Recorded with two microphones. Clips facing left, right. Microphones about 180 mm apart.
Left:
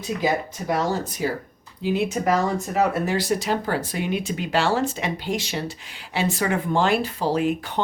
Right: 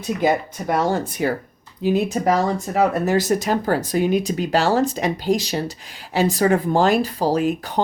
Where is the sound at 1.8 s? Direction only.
40° right (ahead or behind).